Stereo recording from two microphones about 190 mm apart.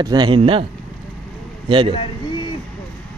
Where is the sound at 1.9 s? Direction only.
25° left (ahead or behind).